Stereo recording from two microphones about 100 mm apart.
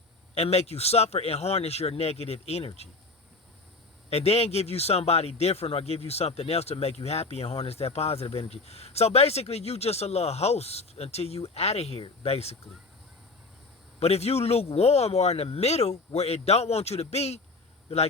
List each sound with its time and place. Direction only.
0.3 s speech: 90° left
4.1 s speech: 90° left
14.0 s speech: 90° left